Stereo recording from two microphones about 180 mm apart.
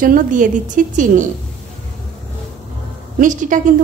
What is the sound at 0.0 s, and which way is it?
A woman's voice, 45° right (ahead or behind).